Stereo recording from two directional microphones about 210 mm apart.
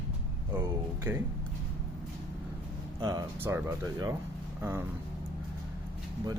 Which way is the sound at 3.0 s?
15° right (ahead or behind).